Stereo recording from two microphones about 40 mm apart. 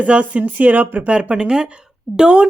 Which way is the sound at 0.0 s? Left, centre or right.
Right.